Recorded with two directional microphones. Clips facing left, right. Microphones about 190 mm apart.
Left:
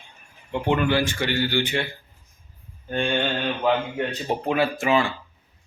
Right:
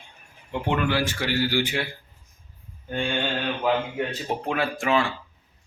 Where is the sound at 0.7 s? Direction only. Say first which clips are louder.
Left 3 dB; centre (ahead or behind).